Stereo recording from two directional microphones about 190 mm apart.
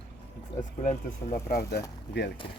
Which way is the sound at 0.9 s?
45° left (ahead or behind).